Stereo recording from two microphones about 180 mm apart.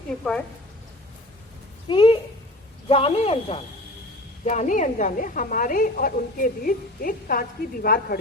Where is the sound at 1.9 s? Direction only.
25° left (ahead or behind).